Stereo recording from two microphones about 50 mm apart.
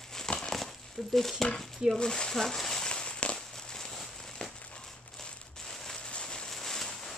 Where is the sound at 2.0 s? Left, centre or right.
Centre.